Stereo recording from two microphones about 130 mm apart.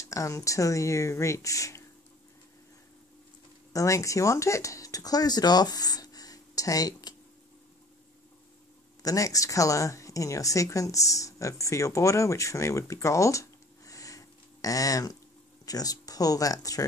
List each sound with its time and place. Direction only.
0.0 s speech: 25° left (ahead or behind)
3.7 s speech: 25° left (ahead or behind)
9.0 s speech: 25° left (ahead or behind)